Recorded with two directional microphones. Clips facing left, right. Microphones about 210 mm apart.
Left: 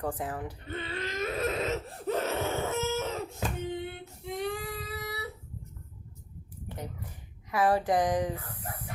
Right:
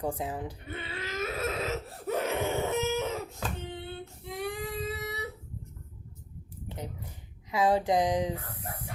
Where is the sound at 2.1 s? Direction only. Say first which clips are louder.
Right 2 dB; 15° right (ahead or behind).